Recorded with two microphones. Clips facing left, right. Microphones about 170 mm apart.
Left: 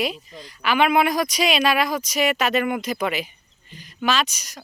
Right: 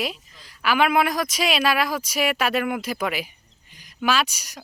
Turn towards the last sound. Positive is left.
turn(degrees=-10)  # may be behind; listen again after turning